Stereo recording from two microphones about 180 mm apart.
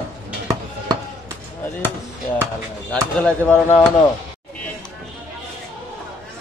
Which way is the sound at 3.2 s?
10° left (ahead or behind).